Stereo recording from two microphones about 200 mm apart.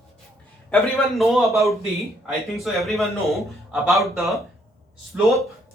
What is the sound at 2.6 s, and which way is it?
A man's voice, centre (ahead or behind).